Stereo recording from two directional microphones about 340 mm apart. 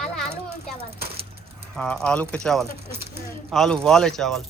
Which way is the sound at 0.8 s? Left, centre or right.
Centre.